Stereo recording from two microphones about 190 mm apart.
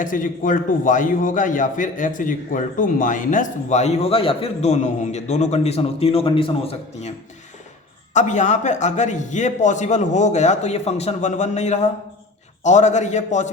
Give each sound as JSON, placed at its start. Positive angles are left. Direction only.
{"t": 0.0, "sound": "a man's voice", "side_deg": 45}
{"t": 8.1, "sound": "a man's voice", "side_deg": 40}